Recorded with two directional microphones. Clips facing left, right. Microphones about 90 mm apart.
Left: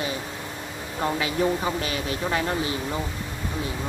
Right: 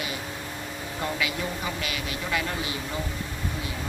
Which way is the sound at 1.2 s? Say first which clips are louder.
Left 6 dB; 35° left (ahead or behind).